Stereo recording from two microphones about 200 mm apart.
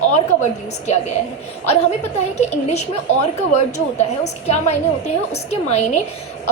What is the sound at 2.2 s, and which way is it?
Speech, 35° left (ahead or behind).